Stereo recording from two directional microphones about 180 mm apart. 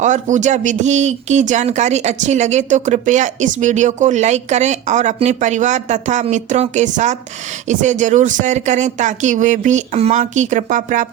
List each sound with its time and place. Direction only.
0.0 s speech: 45° right (ahead or behind)